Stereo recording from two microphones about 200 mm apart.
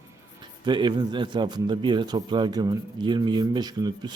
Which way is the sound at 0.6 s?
25° right (ahead or behind).